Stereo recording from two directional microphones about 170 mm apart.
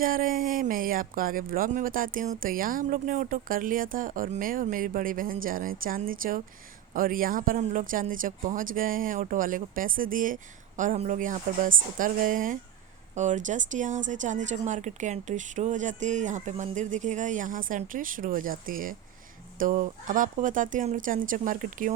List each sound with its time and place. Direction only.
0.0 s speech: 55° right (ahead or behind)